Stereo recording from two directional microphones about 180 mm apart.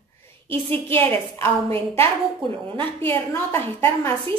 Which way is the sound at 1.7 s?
30° right (ahead or behind).